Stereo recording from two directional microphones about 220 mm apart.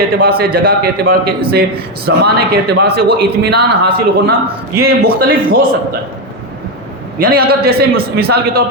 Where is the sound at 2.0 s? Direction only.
45° right (ahead or behind).